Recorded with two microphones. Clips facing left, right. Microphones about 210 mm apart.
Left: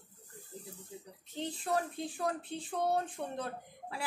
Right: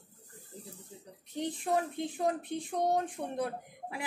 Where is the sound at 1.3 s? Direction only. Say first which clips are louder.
Right 3 dB; 15° right (ahead or behind).